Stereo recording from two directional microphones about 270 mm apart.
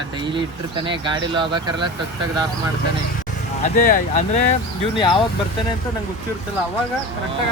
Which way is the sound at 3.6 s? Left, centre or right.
Left.